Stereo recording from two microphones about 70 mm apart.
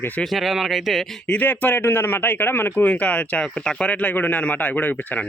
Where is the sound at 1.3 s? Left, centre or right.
Left.